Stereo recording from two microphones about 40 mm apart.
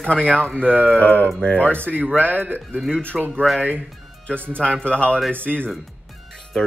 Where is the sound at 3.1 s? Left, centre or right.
Centre.